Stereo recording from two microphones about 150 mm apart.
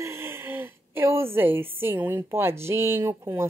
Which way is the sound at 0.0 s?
15° right (ahead or behind).